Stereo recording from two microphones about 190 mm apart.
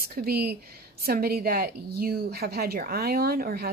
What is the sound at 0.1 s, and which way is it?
A woman's voice, 55° right (ahead or behind).